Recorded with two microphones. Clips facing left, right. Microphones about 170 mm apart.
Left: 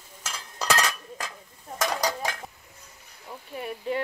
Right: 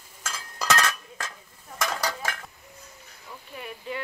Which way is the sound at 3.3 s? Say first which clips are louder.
Left 5 dB; 40° left (ahead or behind).